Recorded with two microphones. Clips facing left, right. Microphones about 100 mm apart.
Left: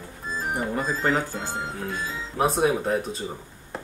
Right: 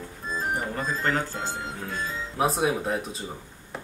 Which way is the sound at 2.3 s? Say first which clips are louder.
Left 3 dB; centre (ahead or behind).